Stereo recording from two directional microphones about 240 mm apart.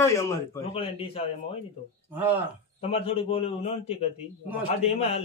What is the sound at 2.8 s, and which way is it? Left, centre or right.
A man's voice, left.